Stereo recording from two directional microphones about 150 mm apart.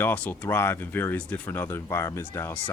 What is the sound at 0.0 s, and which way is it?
Speech, 10° left (ahead or behind).